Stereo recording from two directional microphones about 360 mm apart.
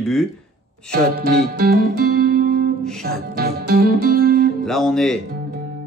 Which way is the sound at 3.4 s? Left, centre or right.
Right.